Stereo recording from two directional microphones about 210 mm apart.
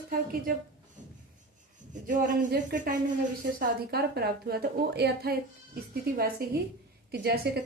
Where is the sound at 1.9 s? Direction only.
40° right (ahead or behind).